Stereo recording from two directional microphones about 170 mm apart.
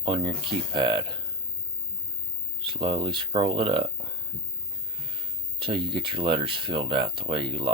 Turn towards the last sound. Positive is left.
turn(degrees=-30)  # may be behind; listen again after turning